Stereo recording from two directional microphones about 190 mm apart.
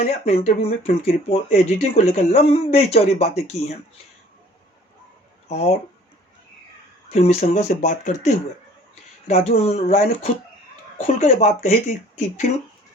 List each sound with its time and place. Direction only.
0.0 s speech: 35° left (ahead or behind)
5.5 s speech: 35° left (ahead or behind)
7.1 s speech: 35° left (ahead or behind)